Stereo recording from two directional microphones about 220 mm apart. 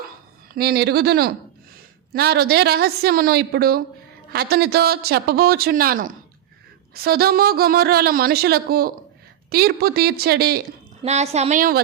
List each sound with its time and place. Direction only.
0.5 s speech: 45° right (ahead or behind)
11.0 s a woman's voice: 30° right (ahead or behind)